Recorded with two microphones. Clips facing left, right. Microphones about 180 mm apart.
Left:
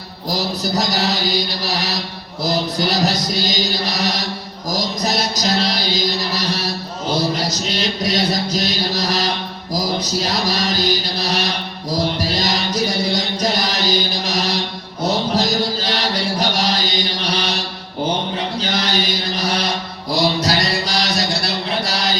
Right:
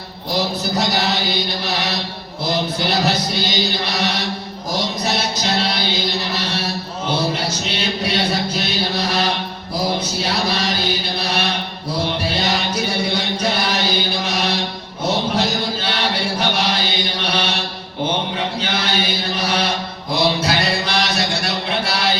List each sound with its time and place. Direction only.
0.3 s music: 40° left (ahead or behind)
10.0 s mantra: 40° left (ahead or behind)
12.2 s music: 35° left (ahead or behind)
13.4 s chant: 35° left (ahead or behind)
20.1 s music: 35° left (ahead or behind)